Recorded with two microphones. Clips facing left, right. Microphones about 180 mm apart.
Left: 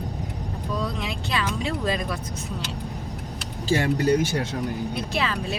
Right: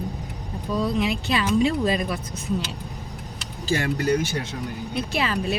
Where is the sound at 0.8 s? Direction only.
5° right (ahead or behind).